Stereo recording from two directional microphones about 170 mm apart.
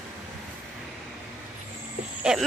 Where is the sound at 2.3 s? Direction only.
5° right (ahead or behind).